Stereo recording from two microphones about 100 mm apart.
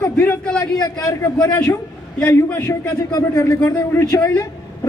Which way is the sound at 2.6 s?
35° left (ahead or behind).